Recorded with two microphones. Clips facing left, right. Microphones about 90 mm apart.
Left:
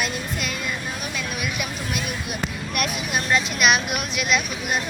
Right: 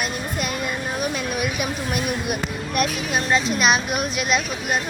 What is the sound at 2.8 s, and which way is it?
Speech, 30° right (ahead or behind).